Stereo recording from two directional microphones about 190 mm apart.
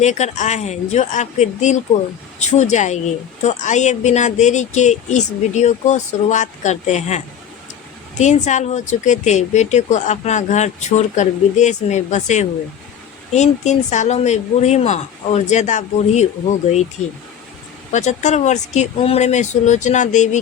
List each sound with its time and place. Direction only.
0.0 s a woman's voice: 40° left (ahead or behind)
8.2 s a woman's voice: 40° left (ahead or behind)
17.9 s a woman's voice: 40° left (ahead or behind)